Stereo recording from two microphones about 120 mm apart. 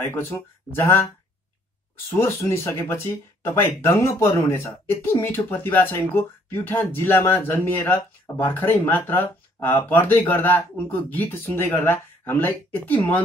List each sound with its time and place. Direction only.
0.0 s speech: 20° left (ahead or behind)
2.1 s speech: 20° left (ahead or behind)